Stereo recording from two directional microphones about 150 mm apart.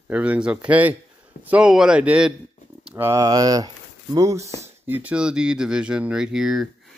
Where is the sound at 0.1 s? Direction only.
10° right (ahead or behind).